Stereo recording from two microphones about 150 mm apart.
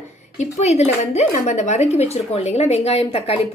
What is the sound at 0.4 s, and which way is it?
A woman's voice, 50° left (ahead or behind).